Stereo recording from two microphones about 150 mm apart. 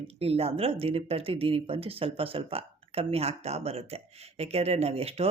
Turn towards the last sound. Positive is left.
turn(degrees=-40)  # may be behind; listen again after turning